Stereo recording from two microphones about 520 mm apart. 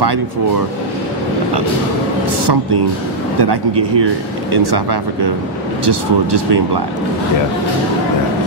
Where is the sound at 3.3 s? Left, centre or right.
Right.